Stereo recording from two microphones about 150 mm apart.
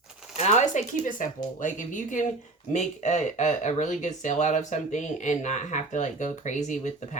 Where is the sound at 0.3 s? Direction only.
50° left (ahead or behind).